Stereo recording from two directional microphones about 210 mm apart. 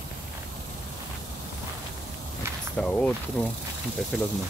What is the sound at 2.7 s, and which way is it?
Speech, 5° left (ahead or behind).